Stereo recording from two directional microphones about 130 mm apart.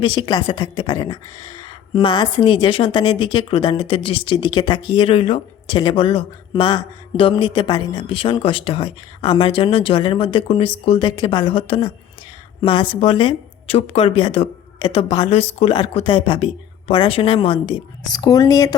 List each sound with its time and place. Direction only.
0.3 s speech: 30° left (ahead or behind)
18.0 s speech: 30° left (ahead or behind)